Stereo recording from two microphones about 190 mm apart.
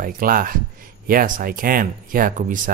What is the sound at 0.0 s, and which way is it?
Speech, 50° right (ahead or behind).